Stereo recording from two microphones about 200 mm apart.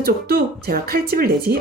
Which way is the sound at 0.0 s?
50° right (ahead or behind).